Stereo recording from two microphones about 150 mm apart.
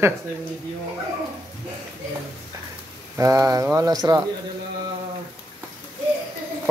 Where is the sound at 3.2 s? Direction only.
20° right (ahead or behind).